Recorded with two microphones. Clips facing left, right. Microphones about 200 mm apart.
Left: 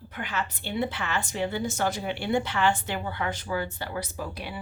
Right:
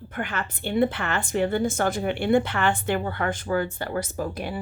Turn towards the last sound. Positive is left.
turn(degrees=-45)  # may be behind; listen again after turning